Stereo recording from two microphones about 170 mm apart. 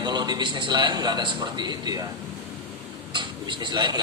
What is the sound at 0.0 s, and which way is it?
A man's voice, 25° right (ahead or behind).